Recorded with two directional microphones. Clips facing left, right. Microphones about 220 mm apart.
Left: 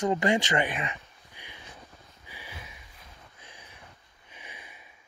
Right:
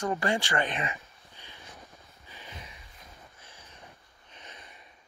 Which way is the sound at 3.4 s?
15° left (ahead or behind).